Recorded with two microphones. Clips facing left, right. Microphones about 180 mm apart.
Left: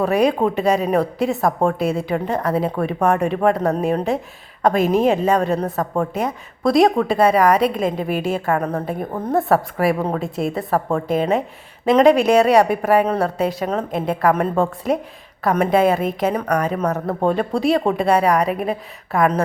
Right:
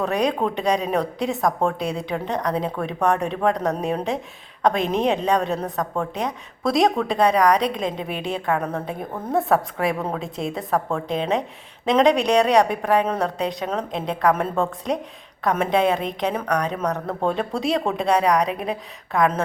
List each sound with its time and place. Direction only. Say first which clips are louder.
0.0 s a woman's voice: left 5 dB; 5° left (ahead or behind)